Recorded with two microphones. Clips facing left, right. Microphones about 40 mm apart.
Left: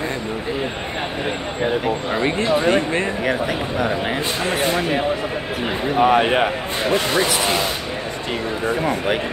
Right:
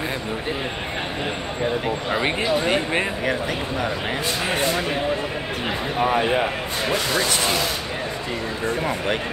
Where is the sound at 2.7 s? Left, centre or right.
Centre.